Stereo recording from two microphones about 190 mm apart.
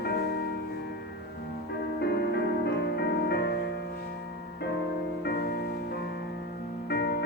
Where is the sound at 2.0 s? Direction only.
60° left (ahead or behind).